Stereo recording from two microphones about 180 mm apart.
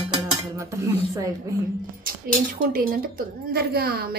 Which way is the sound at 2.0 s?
50° right (ahead or behind).